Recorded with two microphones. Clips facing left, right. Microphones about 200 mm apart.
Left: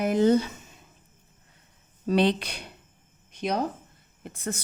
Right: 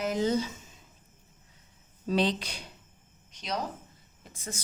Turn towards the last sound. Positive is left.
turn(degrees=60)  # may be behind; listen again after turning